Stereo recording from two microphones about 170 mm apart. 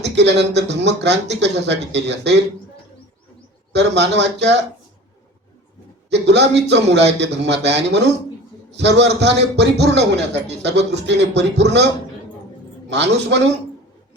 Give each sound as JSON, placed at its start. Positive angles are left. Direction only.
{"t": 0.0, "sound": "speech", "side_deg": -90}
{"t": 3.7, "sound": "speech", "side_deg": -90}
{"t": 6.1, "sound": "speech", "side_deg": -90}
{"t": 12.9, "sound": "speech", "side_deg": -90}